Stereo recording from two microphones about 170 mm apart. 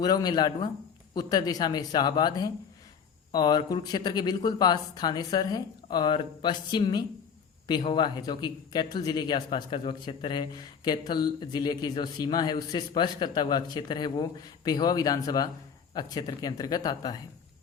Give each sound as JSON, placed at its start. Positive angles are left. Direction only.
{"t": 0.0, "sound": "speech", "side_deg": 25}